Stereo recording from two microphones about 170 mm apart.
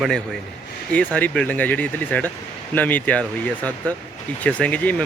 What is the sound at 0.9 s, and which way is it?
Speech, 5° left (ahead or behind).